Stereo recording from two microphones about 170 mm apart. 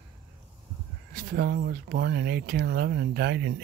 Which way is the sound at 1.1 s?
55° right (ahead or behind).